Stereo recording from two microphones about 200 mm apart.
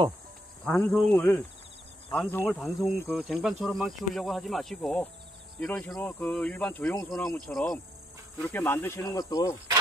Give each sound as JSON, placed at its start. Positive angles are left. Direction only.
{"t": 0.7, "sound": "speech", "side_deg": 5}